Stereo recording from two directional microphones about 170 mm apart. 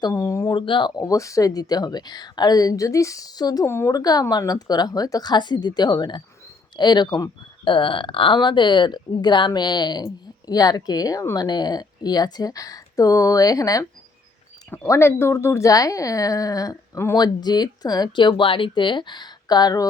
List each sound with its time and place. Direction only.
0.0 s speech: 20° left (ahead or behind)